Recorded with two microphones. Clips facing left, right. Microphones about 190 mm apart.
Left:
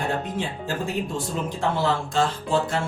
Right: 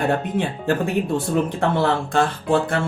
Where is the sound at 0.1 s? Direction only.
60° right (ahead or behind).